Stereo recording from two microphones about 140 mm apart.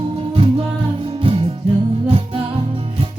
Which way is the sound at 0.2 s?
40° right (ahead or behind).